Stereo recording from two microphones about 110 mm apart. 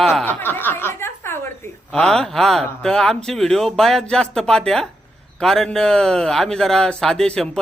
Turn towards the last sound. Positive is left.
turn(degrees=5)  # may be behind; listen again after turning